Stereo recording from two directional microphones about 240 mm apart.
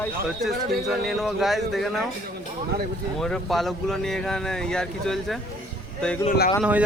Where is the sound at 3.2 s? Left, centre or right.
Centre.